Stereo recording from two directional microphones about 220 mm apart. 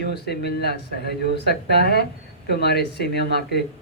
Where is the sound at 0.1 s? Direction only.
50° left (ahead or behind).